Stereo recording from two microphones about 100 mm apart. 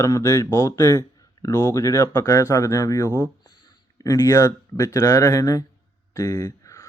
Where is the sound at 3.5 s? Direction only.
55° left (ahead or behind).